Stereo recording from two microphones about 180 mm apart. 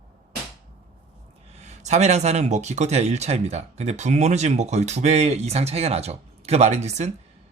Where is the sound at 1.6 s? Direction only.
40° right (ahead or behind).